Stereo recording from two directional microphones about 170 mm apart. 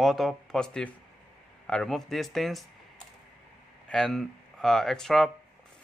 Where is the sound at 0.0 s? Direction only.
Centre (ahead or behind).